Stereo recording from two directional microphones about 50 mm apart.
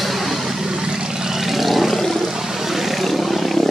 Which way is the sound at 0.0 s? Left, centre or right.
Centre.